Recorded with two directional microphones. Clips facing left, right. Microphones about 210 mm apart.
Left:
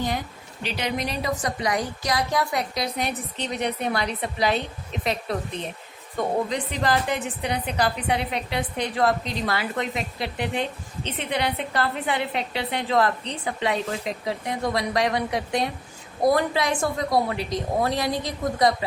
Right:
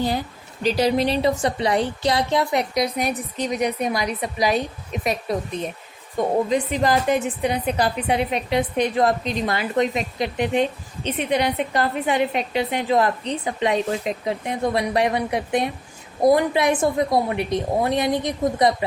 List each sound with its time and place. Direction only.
0.6 s a woman's voice: 40° right (ahead or behind); by 4.6 s 15° right (ahead or behind)
6.1 s a woman's voice: 15° right (ahead or behind)